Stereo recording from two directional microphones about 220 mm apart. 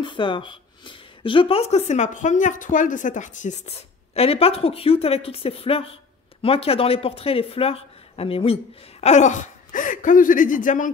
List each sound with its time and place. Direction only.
0.0 s speech: 20° left (ahead or behind); by 10.9 s 35° left (ahead or behind)